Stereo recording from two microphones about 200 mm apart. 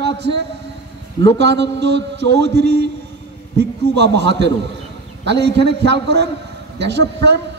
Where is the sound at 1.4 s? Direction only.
60° right (ahead or behind).